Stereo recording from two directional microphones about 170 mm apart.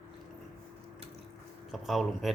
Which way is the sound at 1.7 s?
Centre (ahead or behind).